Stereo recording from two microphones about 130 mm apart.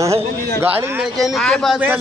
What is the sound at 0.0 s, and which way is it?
Speech, 20° right (ahead or behind).